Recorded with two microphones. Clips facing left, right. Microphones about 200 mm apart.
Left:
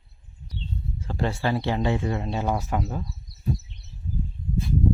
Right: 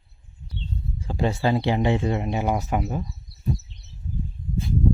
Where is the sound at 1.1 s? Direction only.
15° right (ahead or behind).